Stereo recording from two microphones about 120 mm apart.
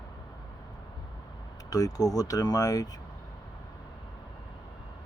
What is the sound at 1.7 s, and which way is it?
Speech, 30° left (ahead or behind).